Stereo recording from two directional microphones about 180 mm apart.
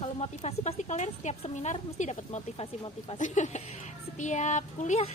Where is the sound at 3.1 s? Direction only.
45° left (ahead or behind).